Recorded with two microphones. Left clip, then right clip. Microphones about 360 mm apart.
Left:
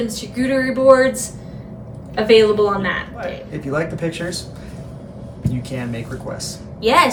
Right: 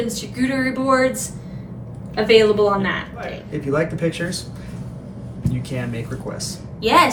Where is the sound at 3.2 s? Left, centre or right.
Centre.